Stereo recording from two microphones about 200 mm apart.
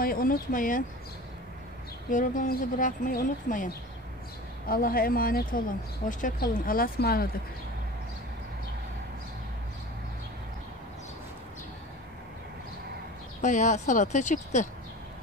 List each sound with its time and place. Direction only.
0.0 s speech: 45° left (ahead or behind)
2.0 s speech: 40° left (ahead or behind)
13.4 s speech: 40° left (ahead or behind)